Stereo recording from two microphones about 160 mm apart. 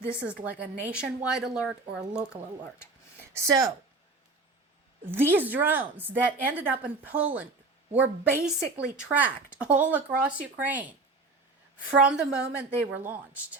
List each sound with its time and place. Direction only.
0.4 s speech: 5° right (ahead or behind)
3.3 s a woman's voice: 20° right (ahead or behind)
5.0 s a woman's voice: 15° right (ahead or behind)
12.0 s a woman's voice: 5° right (ahead or behind)